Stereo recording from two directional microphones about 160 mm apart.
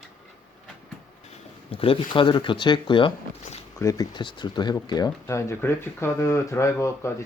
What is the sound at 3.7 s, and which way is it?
Speech, 20° left (ahead or behind).